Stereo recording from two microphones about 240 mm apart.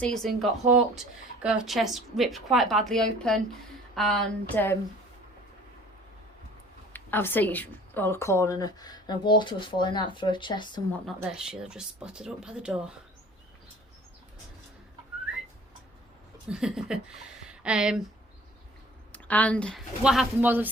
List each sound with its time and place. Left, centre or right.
0.0 s speech: centre
6.9 s a woman's voice: centre
11.0 s speech: centre
16.5 s speech: centre
19.1 s speech: centre